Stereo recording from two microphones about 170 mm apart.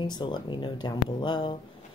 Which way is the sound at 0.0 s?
25° left (ahead or behind).